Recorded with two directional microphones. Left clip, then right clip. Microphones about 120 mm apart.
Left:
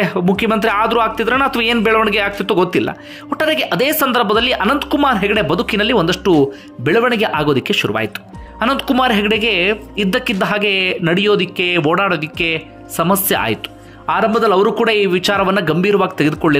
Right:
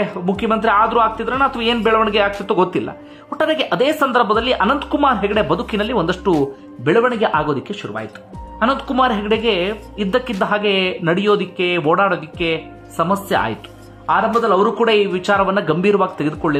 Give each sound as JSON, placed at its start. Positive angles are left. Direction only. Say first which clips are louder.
{"t": 0.0, "sound": "speech", "louder": "left 4 dB", "side_deg": 40}
{"t": 8.5, "sound": "speech", "louder": "left 1 dB", "side_deg": 35}
{"t": 14.4, "sound": "a man's voice", "louder": "left 2 dB", "side_deg": 45}
{"t": 14.9, "sound": "speech", "louder": "left 1 dB", "side_deg": 30}